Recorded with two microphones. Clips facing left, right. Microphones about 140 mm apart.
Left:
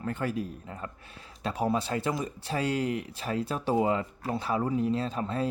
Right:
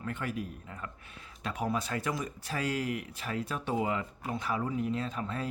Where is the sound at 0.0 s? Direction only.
35° left (ahead or behind).